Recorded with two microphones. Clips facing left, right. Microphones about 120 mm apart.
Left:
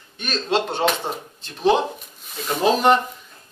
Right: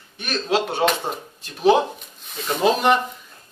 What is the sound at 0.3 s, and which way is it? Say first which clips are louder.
Speech: even; 10° right (ahead or behind).